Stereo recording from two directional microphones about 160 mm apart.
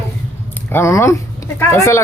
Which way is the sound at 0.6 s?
15° left (ahead or behind).